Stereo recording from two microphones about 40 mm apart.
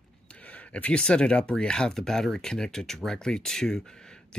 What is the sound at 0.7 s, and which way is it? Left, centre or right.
Speech, left.